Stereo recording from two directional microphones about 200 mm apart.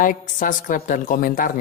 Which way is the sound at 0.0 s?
40° left (ahead or behind).